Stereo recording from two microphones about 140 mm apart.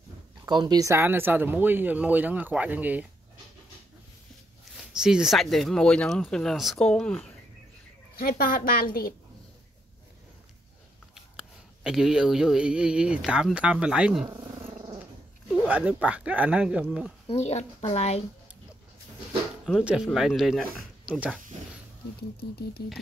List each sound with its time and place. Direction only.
0.5 s speech: 30° right (ahead or behind); by 3.1 s 10° right (ahead or behind)
4.9 s speech: 5° right (ahead or behind)
8.2 s a woman's voice: 90° left
11.1 s speech: 5° right (ahead or behind)
15.5 s speech: 10° right (ahead or behind)
17.4 s a woman's voice: 50° left (ahead or behind)
19.8 s speech: 5° right (ahead or behind)
21.0 s a sound: 10° right (ahead or behind)